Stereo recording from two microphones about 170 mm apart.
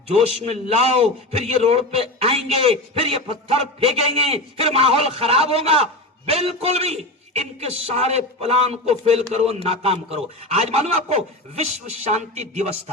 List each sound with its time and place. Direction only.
0.2 s a man's voice: 35° right (ahead or behind)